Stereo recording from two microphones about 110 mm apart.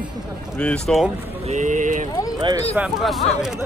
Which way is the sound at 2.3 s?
40° right (ahead or behind).